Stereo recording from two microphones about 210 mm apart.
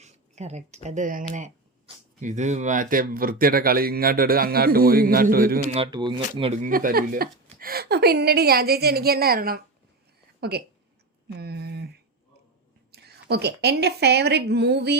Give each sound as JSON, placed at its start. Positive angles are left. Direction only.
{"t": 0.0, "sound": "speech", "side_deg": -35}
{"t": 5.7, "sound": "speech", "side_deg": -25}
{"t": 6.7, "sound": "speech", "side_deg": -40}
{"t": 11.3, "sound": "a sound", "side_deg": -50}
{"t": 12.9, "sound": "a woman's voice", "side_deg": -50}